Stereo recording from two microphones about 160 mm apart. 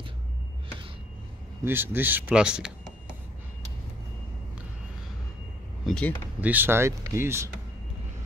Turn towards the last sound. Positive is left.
turn(degrees=-15)  # may be behind; listen again after turning